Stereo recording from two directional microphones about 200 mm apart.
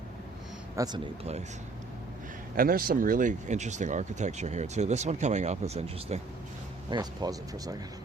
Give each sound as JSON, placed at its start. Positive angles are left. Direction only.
{"t": 0.8, "sound": "speech", "side_deg": -20}
{"t": 2.6, "sound": "speech", "side_deg": -45}
{"t": 6.9, "sound": "speech", "side_deg": -20}